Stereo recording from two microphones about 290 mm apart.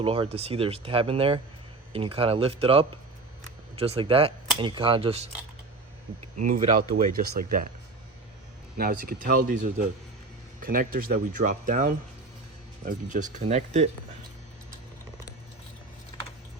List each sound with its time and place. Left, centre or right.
0.0 s speech: centre
6.3 s speech: right
8.8 s speech: right